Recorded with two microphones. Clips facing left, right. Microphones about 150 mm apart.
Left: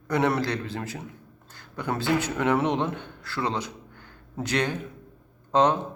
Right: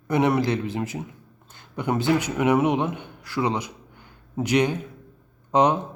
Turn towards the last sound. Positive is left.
turn(degrees=-20)  # may be behind; listen again after turning